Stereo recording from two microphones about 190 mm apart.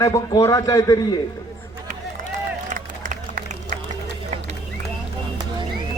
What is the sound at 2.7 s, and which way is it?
Run, 45° right (ahead or behind).